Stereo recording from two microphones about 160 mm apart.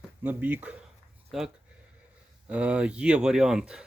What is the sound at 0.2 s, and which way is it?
Speech, 10° right (ahead or behind).